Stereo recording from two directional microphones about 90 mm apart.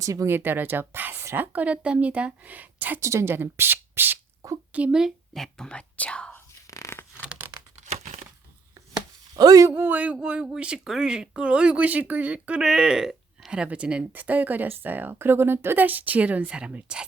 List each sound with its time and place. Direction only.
0.0 s speech: 40° right (ahead or behind)
0.3 s a woman's voice: 25° right (ahead or behind)
3.0 s speech: 35° right (ahead or behind)
4.7 s a woman's voice: 10° right (ahead or behind)
5.3 s speech: 5° left (ahead or behind)
6.3 s whispering: 35° left (ahead or behind)
7.3 s tearing: 20° right (ahead or behind)
9.3 s speech: 45° right (ahead or behind)
9.7 s a woman's voice: 20° right (ahead or behind)